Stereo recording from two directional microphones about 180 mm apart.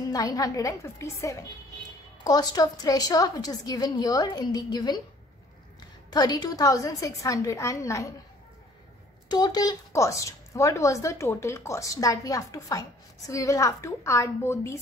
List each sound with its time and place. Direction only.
0.1 s a woman's voice: 20° left (ahead or behind)
6.0 s a woman's voice: 20° left (ahead or behind)
9.3 s speech: 20° left (ahead or behind)